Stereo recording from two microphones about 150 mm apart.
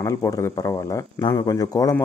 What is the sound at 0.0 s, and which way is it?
A man's voice, 20° left (ahead or behind).